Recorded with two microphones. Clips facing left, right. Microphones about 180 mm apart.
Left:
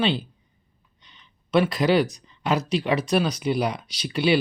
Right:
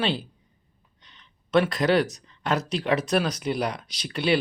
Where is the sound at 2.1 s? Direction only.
5° left (ahead or behind).